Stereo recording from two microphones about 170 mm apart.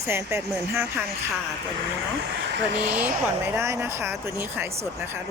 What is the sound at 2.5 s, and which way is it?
Speech, 85° right.